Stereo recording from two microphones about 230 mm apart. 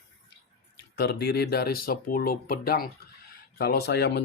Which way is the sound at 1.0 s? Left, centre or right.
Left.